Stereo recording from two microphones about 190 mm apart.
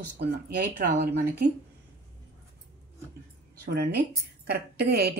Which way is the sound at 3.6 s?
55° right (ahead or behind).